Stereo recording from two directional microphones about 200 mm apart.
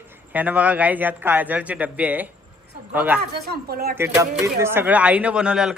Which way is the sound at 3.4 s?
50° right (ahead or behind).